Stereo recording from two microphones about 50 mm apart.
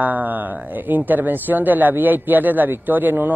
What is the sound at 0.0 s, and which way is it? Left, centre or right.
Speech, right.